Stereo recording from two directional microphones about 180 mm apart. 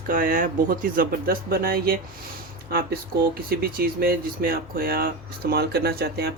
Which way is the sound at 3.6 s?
60° right (ahead or behind).